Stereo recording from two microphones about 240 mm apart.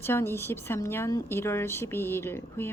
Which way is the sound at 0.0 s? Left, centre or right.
Centre.